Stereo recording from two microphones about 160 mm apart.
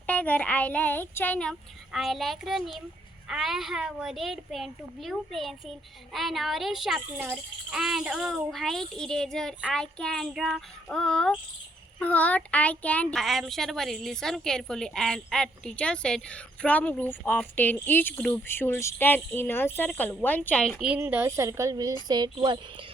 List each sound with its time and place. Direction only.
0.1 s a child's voice: 10° left (ahead or behind); by 22.6 s 30° right (ahead or behind)